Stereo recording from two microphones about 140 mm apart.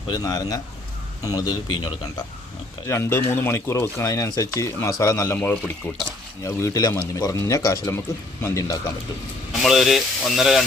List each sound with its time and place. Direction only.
0.1 s a man's voice: 25° left (ahead or behind)
2.8 s speech: 20° left (ahead or behind)
9.5 s speech: centre (ahead or behind)